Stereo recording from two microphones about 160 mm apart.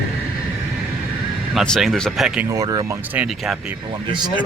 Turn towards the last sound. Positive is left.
turn(degrees=-30)  # may be behind; listen again after turning